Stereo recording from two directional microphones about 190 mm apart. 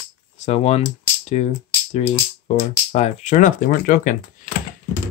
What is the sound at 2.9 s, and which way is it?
Speech, 35° left (ahead or behind).